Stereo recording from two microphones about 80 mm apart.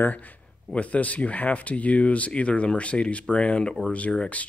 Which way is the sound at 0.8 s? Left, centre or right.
Centre.